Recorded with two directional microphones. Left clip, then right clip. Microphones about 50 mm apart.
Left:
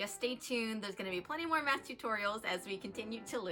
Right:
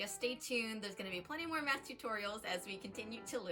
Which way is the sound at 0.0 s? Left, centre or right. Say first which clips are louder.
Left 2 dB; left.